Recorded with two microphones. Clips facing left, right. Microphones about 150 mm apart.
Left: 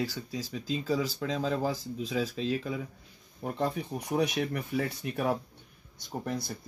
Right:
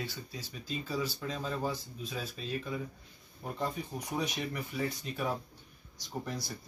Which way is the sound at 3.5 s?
65° left (ahead or behind).